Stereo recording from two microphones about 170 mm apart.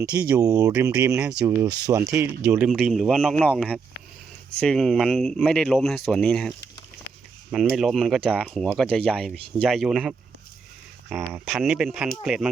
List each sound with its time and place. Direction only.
0.1 s speech: 20° right (ahead or behind); by 6.5 s centre (ahead or behind)
7.5 s speech: centre (ahead or behind)
11.1 s speech: 15° right (ahead or behind)
11.4 s speech: centre (ahead or behind)